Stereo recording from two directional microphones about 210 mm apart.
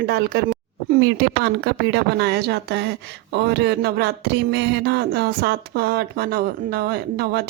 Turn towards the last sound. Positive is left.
turn(degrees=-45)  # may be behind; listen again after turning